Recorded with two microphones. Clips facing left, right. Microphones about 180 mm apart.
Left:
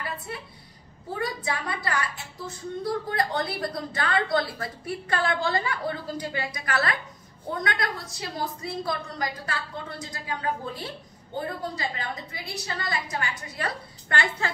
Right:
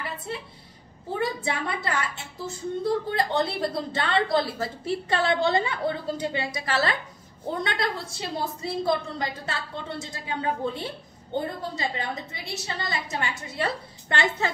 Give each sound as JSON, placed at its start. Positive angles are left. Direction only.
{"t": 1.1, "sound": "a woman's voice", "side_deg": -25}